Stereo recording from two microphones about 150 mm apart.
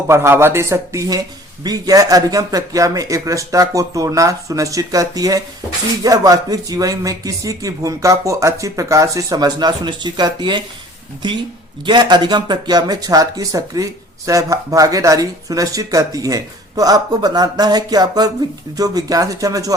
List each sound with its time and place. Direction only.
0.1 s a man's voice: 15° right (ahead or behind)
11.9 s speech: 30° right (ahead or behind)